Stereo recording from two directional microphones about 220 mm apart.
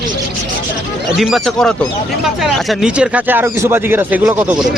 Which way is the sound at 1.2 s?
Centre (ahead or behind).